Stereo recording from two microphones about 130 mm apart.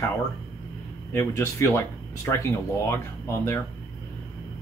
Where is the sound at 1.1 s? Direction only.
20° left (ahead or behind).